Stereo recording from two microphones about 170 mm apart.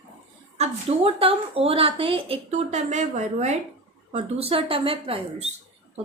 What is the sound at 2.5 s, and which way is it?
A woman's voice, 45° right (ahead or behind).